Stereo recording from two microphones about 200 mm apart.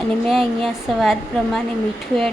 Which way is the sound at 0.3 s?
Centre (ahead or behind).